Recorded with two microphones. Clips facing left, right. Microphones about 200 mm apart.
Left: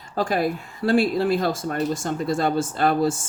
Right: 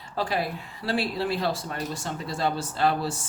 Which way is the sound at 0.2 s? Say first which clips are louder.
Left 6 dB; 45° left (ahead or behind).